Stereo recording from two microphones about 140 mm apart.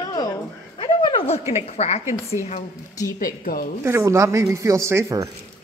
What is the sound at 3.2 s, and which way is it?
Speech, 90° left.